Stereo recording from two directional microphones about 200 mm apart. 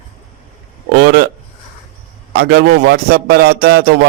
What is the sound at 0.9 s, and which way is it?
Speech, 55° right (ahead or behind).